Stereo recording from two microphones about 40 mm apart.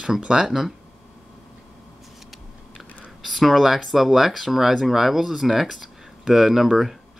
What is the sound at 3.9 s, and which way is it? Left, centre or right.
Speech, centre.